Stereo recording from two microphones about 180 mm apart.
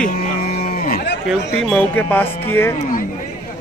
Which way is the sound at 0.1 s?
55° left (ahead or behind).